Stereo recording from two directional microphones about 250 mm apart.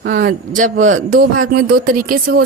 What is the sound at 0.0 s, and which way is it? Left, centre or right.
Speech, right.